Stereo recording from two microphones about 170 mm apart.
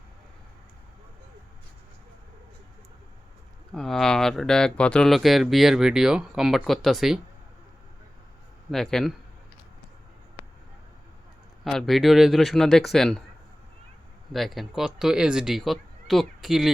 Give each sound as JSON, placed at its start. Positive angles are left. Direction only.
{"t": 3.8, "sound": "speech", "side_deg": 0}
{"t": 8.7, "sound": "speech", "side_deg": 0}
{"t": 11.6, "sound": "speech", "side_deg": 0}
{"t": 14.3, "sound": "speech", "side_deg": 0}